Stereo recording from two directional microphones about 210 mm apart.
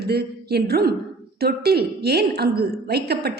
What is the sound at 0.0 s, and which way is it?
A woman's voice, 50° right (ahead or behind).